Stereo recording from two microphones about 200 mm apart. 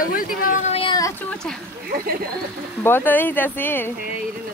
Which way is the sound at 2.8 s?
10° left (ahead or behind).